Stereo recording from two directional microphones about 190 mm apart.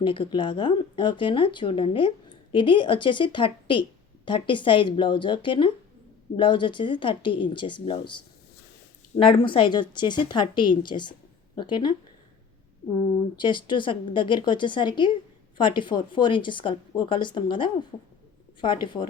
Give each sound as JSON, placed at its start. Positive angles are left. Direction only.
{"t": 0.0, "sound": "speech", "side_deg": 25}
{"t": 13.4, "sound": "speech", "side_deg": 25}